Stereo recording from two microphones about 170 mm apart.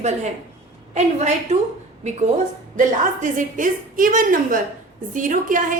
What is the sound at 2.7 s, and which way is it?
A woman's voice, 50° right (ahead or behind).